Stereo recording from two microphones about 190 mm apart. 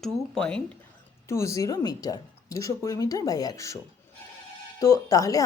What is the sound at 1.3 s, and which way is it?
A woman's voice, 15° left (ahead or behind).